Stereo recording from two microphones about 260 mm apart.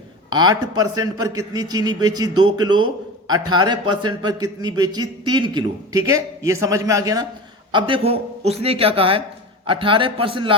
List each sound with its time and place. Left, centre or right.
0.3 s a man's voice: centre